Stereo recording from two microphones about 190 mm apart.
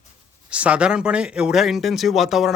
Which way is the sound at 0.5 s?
5° right (ahead or behind).